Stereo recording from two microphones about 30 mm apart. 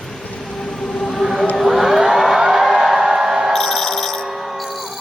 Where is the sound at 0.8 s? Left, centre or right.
Centre.